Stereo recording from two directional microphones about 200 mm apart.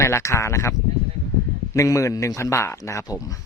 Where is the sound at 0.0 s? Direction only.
15° left (ahead or behind).